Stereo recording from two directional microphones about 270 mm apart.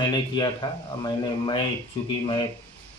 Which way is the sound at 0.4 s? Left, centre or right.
Centre.